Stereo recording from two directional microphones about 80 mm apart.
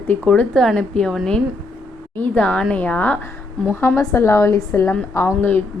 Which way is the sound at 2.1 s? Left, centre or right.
Centre.